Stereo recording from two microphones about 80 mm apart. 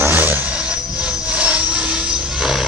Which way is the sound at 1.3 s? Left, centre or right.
Centre.